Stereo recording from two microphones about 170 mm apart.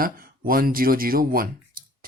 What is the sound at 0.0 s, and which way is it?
Speech, 55° right (ahead or behind).